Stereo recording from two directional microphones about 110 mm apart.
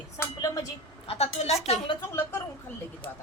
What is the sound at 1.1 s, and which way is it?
Speech, 75° left (ahead or behind).